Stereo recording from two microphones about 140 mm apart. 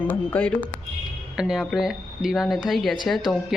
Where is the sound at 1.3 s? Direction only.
5° right (ahead or behind).